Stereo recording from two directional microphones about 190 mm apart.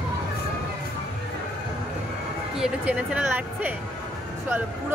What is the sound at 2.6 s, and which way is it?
Speech, 5° right (ahead or behind).